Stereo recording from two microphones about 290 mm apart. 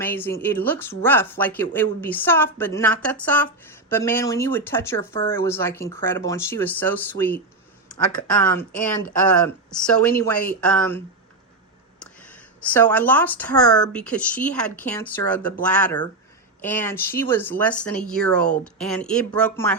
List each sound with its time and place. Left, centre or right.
0.0 s speech: centre
10.2 s speech: centre
12.7 s speech: centre